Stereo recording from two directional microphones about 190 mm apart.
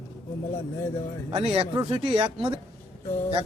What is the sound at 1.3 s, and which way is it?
Speech, 30° right (ahead or behind).